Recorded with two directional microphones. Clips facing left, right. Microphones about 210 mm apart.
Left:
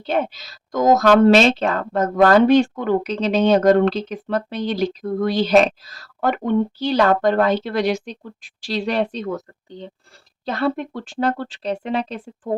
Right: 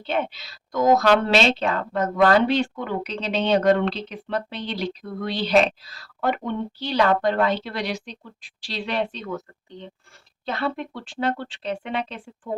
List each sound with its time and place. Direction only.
0.0 s speech: 40° left (ahead or behind)